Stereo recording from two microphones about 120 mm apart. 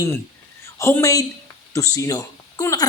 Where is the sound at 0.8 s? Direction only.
25° left (ahead or behind).